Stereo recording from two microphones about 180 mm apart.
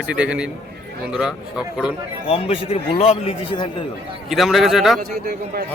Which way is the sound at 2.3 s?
35° left (ahead or behind).